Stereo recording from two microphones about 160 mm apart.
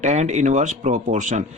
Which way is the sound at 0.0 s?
45° right (ahead or behind).